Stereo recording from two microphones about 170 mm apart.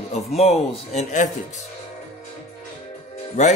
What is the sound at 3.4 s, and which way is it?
Speech, 45° left (ahead or behind).